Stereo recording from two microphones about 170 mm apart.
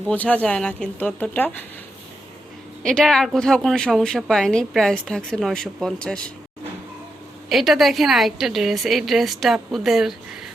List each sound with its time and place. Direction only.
0.1 s speech: 10° left (ahead or behind)
2.8 s a woman's voice: centre (ahead or behind)
7.5 s a woman's voice: centre (ahead or behind)